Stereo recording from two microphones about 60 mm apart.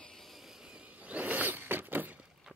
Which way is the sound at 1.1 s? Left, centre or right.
Right.